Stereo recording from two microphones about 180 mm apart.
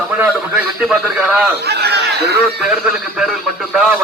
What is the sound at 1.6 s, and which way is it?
Chatter, 65° right (ahead or behind).